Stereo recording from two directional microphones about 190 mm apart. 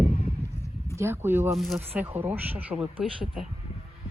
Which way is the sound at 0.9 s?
15° right (ahead or behind).